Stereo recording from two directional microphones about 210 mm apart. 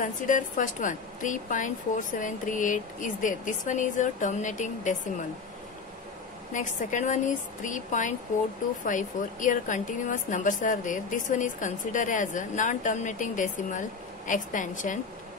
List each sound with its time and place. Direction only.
0.0 s a woman's voice: 35° left (ahead or behind)
6.5 s a woman's voice: 35° left (ahead or behind)